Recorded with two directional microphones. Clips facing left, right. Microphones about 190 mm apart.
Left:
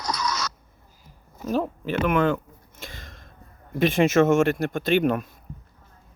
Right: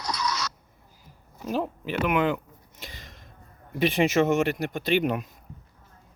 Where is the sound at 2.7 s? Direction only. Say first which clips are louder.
Left 3 dB; 50° left (ahead or behind).